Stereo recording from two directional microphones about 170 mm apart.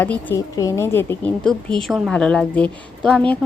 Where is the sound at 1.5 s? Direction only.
5° left (ahead or behind).